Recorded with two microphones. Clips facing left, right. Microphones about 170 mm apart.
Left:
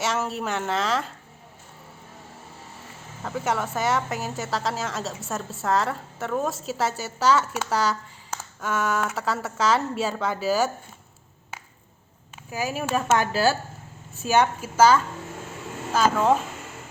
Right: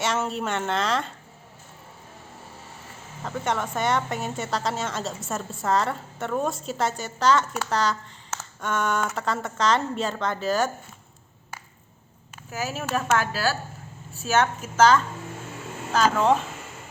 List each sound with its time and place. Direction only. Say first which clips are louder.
0.0 s a woman's voice: even; centre (ahead or behind)
3.2 s a woman's voice: left 1 dB; 5° left (ahead or behind)
12.5 s a woman's voice: left 2 dB; 10° left (ahead or behind)
13.1 s a woman's voice: left 4 dB; 25° left (ahead or behind); by 16.4 s 5° left (ahead or behind)